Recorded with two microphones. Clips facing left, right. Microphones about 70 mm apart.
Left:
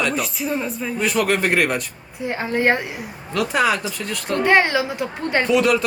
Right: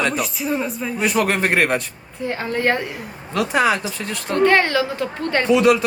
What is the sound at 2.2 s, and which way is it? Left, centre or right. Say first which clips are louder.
Speech: left 1 dB; centre.